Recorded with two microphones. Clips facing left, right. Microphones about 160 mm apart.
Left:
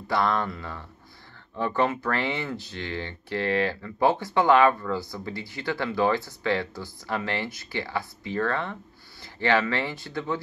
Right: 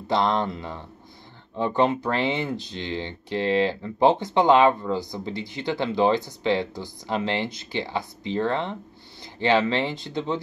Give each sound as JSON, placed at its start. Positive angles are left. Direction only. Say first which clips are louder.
{"t": 0.1, "sound": "speech", "louder": "right 2 dB", "side_deg": -20}